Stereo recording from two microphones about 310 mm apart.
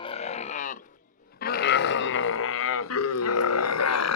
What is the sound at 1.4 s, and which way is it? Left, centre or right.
Burping, left.